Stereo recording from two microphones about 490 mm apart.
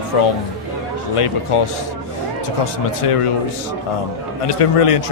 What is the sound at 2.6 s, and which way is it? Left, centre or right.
Speech, left.